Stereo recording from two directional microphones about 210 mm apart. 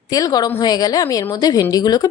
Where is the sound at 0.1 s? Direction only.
15° left (ahead or behind).